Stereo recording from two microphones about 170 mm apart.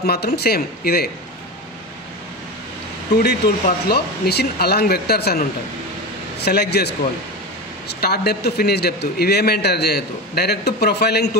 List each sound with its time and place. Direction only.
0.0 s a man's voice: 70° left (ahead or behind)
3.2 s a man's voice: 65° left (ahead or behind)
6.4 s a man's voice: 70° left (ahead or behind)
7.9 s a man's voice: 70° left (ahead or behind)